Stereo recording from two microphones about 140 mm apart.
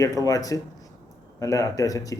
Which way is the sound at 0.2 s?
25° left (ahead or behind).